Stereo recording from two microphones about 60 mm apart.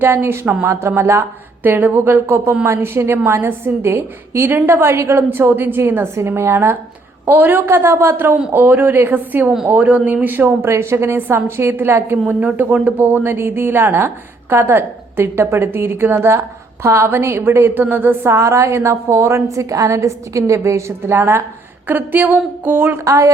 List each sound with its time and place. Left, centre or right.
0.0 s a woman's voice: right
1.6 s a woman's voice: right
10.7 s a woman's voice: right
12.3 s a woman's voice: right
18.3 s a woman's voice: right
21.0 s a woman's voice: right
23.0 s a woman's voice: right